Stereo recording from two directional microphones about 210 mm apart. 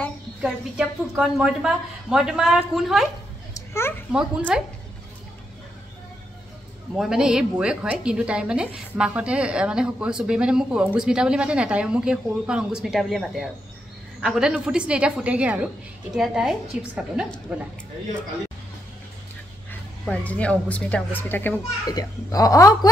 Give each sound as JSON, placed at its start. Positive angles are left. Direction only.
{"t": 0.4, "sound": "a woman's voice", "side_deg": -5}
{"t": 3.5, "sound": "a sound", "side_deg": 10}
{"t": 4.1, "sound": "a woman's voice", "side_deg": -5}
{"t": 7.0, "sound": "a woman's voice", "side_deg": -5}
{"t": 19.7, "sound": "a child's voice", "side_deg": 5}